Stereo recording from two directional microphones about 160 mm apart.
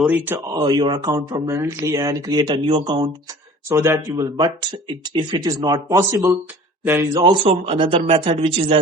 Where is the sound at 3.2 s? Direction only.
20° right (ahead or behind).